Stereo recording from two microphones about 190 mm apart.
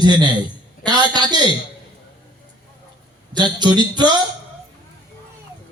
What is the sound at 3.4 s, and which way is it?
Speech, 25° right (ahead or behind).